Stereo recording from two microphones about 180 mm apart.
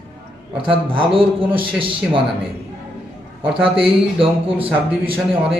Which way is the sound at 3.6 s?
30° right (ahead or behind).